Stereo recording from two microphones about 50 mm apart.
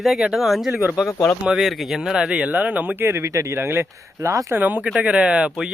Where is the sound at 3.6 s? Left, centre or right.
Right.